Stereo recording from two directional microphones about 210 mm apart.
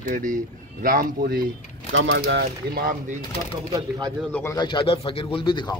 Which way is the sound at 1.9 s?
60° right (ahead or behind).